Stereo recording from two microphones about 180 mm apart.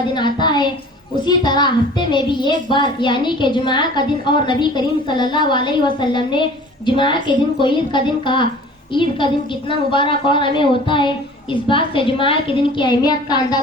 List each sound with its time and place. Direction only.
0.1 s a child's voice: 25° left (ahead or behind)